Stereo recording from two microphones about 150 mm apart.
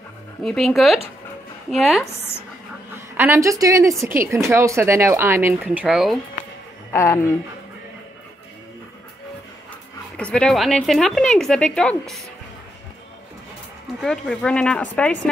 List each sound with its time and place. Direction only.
0.4 s a woman's voice: centre (ahead or behind)
2.9 s a woman's voice: 15° right (ahead or behind)
5.7 s a woman's voice: 5° right (ahead or behind)
6.9 s speech: 20° left (ahead or behind)
10.1 s a woman's voice: 5° left (ahead or behind)
14.0 s speech: 5° left (ahead or behind)